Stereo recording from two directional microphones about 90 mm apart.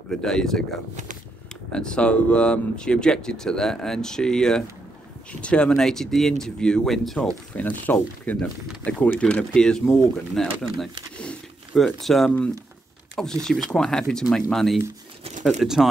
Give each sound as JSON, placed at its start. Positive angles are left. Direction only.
{"t": 0.1, "sound": "speech", "side_deg": 5}
{"t": 1.7, "sound": "speech", "side_deg": 10}
{"t": 7.5, "sound": "speech", "side_deg": 15}
{"t": 11.1, "sound": "zipper", "side_deg": 10}
{"t": 13.2, "sound": "speech", "side_deg": 5}